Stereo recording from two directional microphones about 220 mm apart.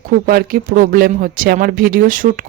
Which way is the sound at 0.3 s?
40° right (ahead or behind).